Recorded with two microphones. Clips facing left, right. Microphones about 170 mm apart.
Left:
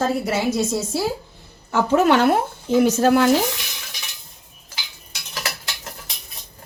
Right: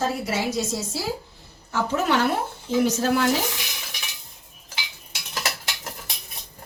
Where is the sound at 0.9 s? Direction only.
60° left (ahead or behind).